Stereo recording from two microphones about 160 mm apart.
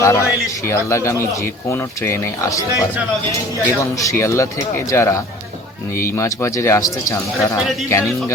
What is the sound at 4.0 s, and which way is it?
A man's voice, 20° left (ahead or behind).